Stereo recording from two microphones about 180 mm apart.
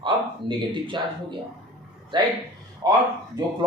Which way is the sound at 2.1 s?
25° right (ahead or behind).